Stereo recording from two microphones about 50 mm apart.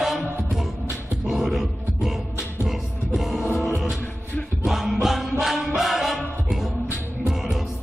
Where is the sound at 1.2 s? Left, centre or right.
Centre.